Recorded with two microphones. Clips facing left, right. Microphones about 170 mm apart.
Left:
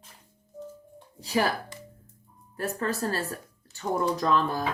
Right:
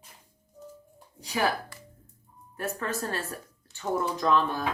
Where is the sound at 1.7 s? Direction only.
20° left (ahead or behind).